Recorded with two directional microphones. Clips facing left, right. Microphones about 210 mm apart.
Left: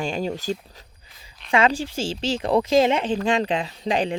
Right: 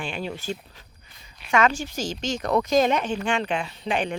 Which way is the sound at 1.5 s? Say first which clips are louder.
Left 2 dB; 30° left (ahead or behind).